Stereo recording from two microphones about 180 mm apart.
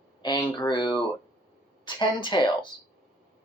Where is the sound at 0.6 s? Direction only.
25° left (ahead or behind).